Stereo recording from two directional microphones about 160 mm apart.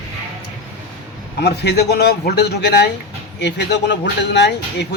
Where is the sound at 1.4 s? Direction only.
90° left.